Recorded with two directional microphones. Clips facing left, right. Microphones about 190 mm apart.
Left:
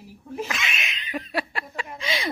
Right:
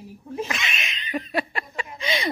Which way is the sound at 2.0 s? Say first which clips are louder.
Right 3 dB; centre (ahead or behind).